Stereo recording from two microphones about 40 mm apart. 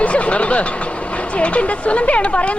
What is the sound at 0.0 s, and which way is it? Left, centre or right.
Vehicle, left.